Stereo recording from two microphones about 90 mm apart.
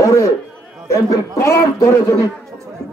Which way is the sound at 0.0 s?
35° left (ahead or behind).